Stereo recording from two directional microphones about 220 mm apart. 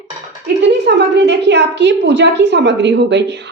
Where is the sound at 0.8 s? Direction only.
50° right (ahead or behind).